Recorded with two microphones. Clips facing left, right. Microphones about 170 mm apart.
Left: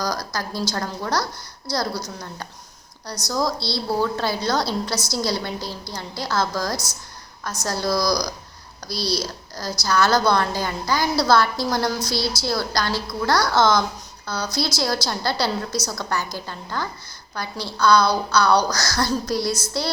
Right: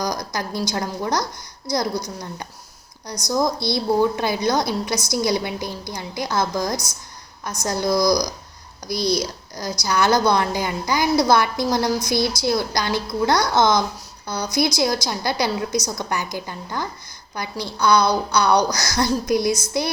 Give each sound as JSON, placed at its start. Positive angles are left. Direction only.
{"t": 0.0, "sound": "a woman's voice", "side_deg": -20}